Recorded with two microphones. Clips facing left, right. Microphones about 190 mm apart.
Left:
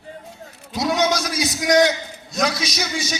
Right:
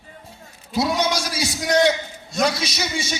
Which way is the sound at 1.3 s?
30° right (ahead or behind).